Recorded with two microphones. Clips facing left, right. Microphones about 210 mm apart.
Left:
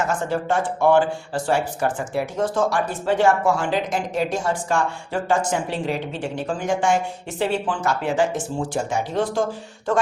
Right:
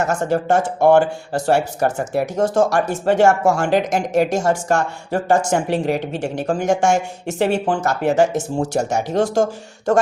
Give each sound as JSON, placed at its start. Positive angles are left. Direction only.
{"t": 0.0, "sound": "speech", "side_deg": -45}